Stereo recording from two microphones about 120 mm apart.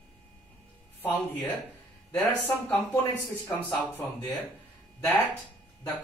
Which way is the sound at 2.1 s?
15° left (ahead or behind).